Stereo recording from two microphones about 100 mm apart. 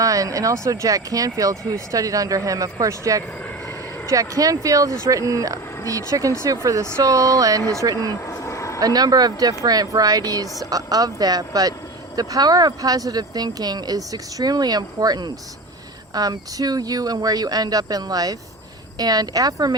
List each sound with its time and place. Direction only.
0.0 s speech: 35° right (ahead or behind)
8.3 s a sound: 30° left (ahead or behind)
8.8 s speech: 40° right (ahead or behind)